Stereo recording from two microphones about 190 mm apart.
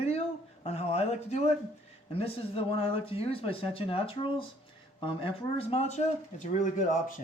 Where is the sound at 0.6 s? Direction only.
35° left (ahead or behind).